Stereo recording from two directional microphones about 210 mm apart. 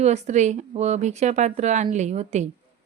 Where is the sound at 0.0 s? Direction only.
35° right (ahead or behind).